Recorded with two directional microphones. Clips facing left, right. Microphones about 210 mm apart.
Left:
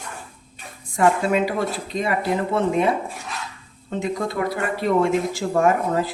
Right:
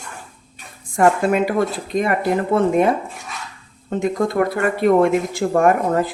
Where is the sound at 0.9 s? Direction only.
50° right (ahead or behind).